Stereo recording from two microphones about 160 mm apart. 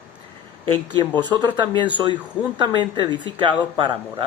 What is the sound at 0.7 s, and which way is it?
Speech, 30° right (ahead or behind).